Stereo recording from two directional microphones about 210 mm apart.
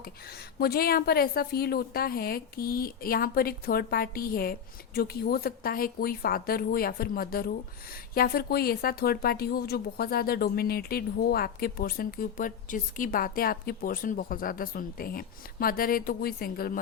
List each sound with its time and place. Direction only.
0.0 s a woman's voice: 50° left (ahead or behind)